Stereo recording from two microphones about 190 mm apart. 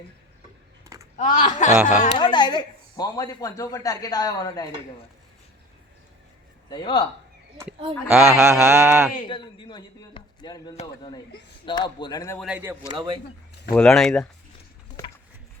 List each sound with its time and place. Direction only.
1.1 s speech: 40° left (ahead or behind)
1.7 s mantra: 10° right (ahead or behind)
2.1 s speech: 25° left (ahead or behind)
6.7 s speech: 25° left (ahead or behind)
8.1 s mantra: 15° right (ahead or behind)
9.2 s speech: 25° left (ahead or behind)
12.4 s mantra: 5° right (ahead or behind)
12.9 s speech: 25° right (ahead or behind)
13.7 s speech: 5° left (ahead or behind)